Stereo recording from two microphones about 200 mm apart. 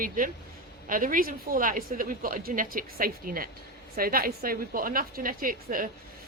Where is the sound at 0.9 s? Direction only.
45° right (ahead or behind).